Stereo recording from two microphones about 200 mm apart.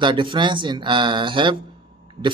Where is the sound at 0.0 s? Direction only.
25° right (ahead or behind).